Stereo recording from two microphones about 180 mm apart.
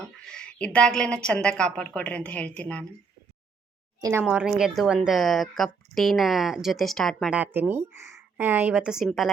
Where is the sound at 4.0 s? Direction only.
15° right (ahead or behind).